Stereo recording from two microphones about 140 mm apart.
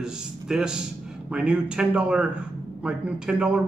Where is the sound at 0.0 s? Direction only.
5° right (ahead or behind).